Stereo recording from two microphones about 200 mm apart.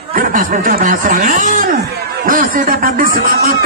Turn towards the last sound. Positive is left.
turn(degrees=-45)  # may be behind; listen again after turning